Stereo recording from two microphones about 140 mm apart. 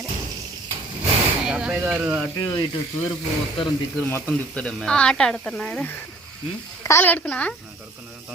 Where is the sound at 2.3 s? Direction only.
25° left (ahead or behind).